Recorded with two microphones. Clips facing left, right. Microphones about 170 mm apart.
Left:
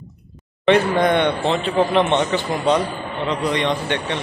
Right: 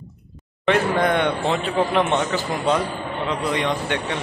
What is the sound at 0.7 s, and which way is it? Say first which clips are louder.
A man's voice: left 3 dB; 5° right (ahead or behind).